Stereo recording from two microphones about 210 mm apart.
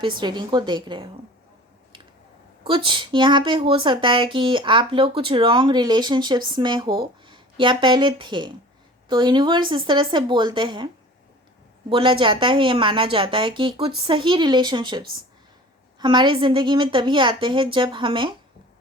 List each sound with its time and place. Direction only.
0.2 s speech: 20° right (ahead or behind)
2.6 s speech: 25° right (ahead or behind)
11.9 s speech: 25° right (ahead or behind)